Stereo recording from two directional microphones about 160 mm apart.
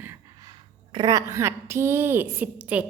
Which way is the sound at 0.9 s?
25° right (ahead or behind).